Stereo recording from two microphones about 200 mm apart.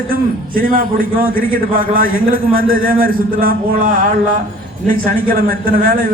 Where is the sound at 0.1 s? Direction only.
45° right (ahead or behind).